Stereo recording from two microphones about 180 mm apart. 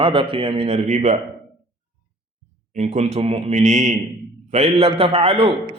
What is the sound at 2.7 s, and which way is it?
Speech, 35° right (ahead or behind).